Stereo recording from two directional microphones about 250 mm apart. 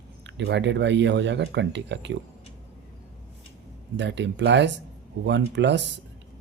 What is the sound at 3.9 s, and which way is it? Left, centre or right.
Speech, right.